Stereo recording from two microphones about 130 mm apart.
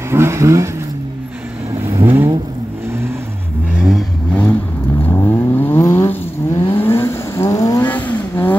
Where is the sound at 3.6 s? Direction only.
5° right (ahead or behind).